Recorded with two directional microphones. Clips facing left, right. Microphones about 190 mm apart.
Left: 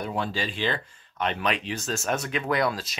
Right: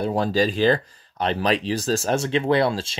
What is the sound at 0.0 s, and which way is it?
Speech, 40° right (ahead or behind).